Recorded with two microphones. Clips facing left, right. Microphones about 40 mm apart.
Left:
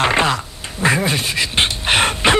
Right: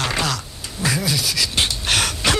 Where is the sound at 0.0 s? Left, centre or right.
Left.